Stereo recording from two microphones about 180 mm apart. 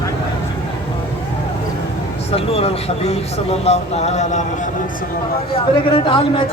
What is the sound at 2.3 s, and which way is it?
Speech, 35° left (ahead or behind).